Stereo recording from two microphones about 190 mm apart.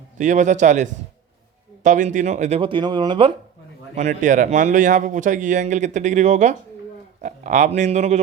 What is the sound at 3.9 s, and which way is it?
Speech, 40° right (ahead or behind).